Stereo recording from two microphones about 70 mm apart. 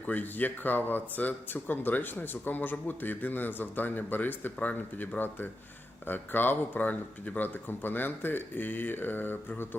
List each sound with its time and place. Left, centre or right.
0.0 s speech: left